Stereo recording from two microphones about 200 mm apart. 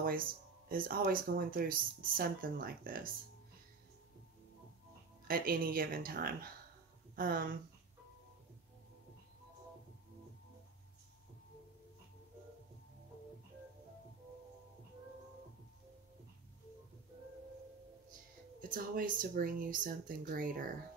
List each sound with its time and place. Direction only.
0.0 s speech: 45° right (ahead or behind)
5.3 s speech: 45° right (ahead or behind)
18.6 s speech: 45° right (ahead or behind)